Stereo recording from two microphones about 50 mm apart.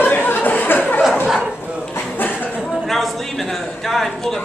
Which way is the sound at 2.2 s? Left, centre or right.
Left.